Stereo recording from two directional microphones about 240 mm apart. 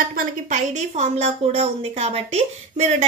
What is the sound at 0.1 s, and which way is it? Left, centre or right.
A woman's voice, right.